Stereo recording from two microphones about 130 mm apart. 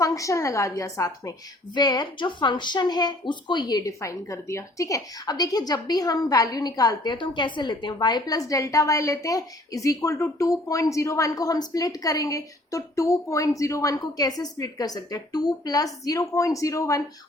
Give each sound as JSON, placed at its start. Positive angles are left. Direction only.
{"t": 0.0, "sound": "a woman's voice", "side_deg": 25}